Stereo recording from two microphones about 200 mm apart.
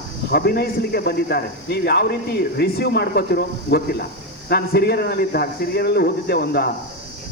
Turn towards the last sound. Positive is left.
turn(degrees=50)  # may be behind; listen again after turning